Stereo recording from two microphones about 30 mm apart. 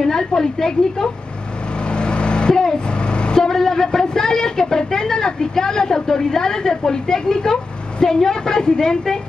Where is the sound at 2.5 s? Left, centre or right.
Centre.